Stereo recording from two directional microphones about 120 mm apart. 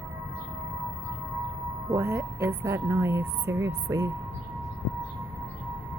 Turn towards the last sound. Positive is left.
turn(degrees=-25)  # may be behind; listen again after turning